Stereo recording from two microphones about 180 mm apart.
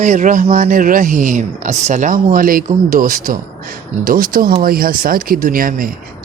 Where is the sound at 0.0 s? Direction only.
45° right (ahead or behind).